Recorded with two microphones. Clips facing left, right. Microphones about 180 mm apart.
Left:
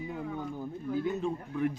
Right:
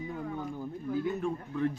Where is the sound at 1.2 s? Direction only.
15° left (ahead or behind).